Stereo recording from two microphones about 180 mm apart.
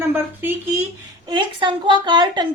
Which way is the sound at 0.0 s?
15° right (ahead or behind).